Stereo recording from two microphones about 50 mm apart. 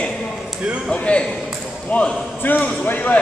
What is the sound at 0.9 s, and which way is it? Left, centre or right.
A man's voice, left.